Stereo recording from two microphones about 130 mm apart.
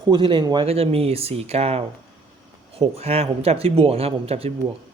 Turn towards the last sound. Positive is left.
turn(degrees=-50)  # may be behind; listen again after turning